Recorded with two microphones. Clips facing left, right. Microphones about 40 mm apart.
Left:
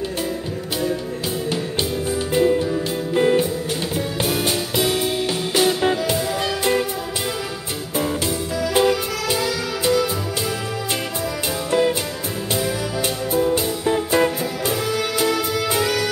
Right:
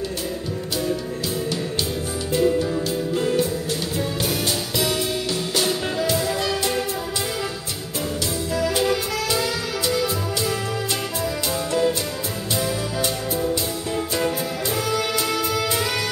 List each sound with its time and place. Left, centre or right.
2.3 s music: left
8.7 s music: left
11.7 s music: left